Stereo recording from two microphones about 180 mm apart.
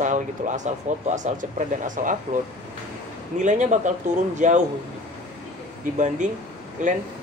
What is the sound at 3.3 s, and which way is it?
Speech, 45° right (ahead or behind).